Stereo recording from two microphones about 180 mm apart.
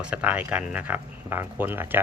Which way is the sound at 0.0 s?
5° right (ahead or behind).